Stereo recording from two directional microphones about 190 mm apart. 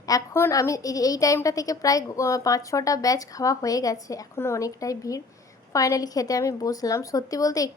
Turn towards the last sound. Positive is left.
turn(degrees=20)  # may be behind; listen again after turning